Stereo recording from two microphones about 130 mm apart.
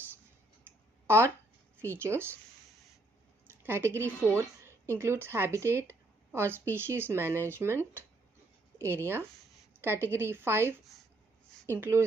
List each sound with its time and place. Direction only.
1.0 s a sound: 20° right (ahead or behind)
1.8 s speech: 20° right (ahead or behind)
3.6 s a woman's voice: 20° right (ahead or behind)